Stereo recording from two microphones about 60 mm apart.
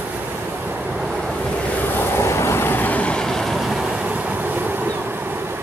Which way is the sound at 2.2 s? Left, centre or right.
Left.